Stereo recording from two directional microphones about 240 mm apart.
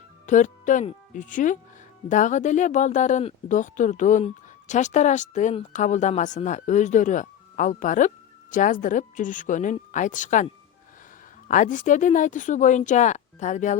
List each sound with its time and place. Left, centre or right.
0.3 s speech: left